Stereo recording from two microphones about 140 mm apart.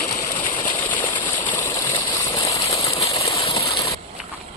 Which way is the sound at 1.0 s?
35° left (ahead or behind).